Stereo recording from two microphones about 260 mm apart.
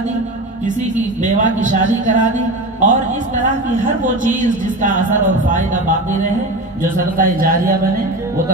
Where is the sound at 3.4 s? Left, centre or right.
Right.